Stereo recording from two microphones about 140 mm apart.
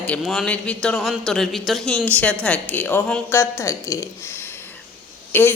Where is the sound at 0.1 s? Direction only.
5° left (ahead or behind).